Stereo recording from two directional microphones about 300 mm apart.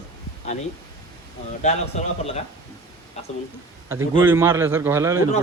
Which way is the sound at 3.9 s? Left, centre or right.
Centre.